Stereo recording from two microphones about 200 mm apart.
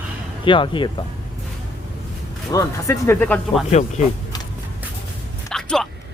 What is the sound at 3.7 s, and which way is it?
Speech, 35° left (ahead or behind).